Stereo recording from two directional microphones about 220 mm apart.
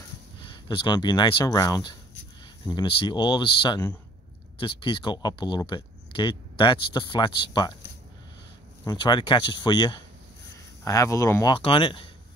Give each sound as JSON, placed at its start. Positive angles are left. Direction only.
{"t": 0.4, "sound": "speech", "side_deg": 20}
{"t": 8.8, "sound": "speech", "side_deg": 20}